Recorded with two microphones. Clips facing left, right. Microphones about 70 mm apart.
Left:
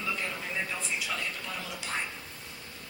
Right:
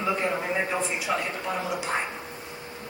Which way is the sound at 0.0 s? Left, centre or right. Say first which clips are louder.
Right 8 dB; right.